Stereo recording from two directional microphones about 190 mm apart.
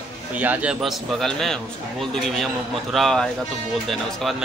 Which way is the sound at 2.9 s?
Centre (ahead or behind).